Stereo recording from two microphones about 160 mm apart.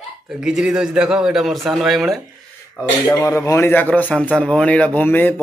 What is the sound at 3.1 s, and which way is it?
A man's voice, 20° left (ahead or behind).